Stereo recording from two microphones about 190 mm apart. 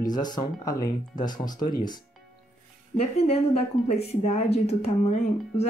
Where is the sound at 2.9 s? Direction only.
30° left (ahead or behind).